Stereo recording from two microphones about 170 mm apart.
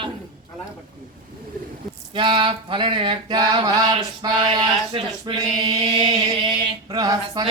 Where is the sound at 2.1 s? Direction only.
30° right (ahead or behind).